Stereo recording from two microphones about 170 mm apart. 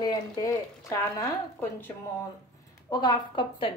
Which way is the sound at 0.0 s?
20° left (ahead or behind).